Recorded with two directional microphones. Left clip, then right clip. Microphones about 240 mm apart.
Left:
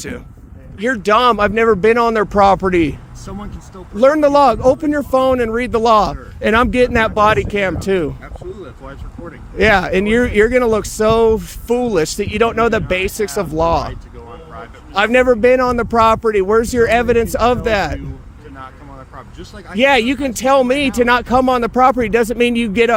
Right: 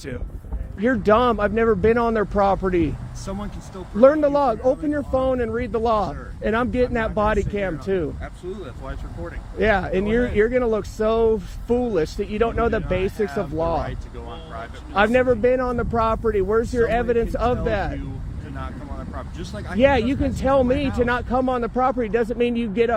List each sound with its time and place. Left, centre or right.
0.8 s speech: left
3.2 s speech: centre
4.0 s speech: left
8.2 s speech: centre
9.6 s speech: left
14.9 s speech: left
19.1 s speech: centre
19.8 s speech: left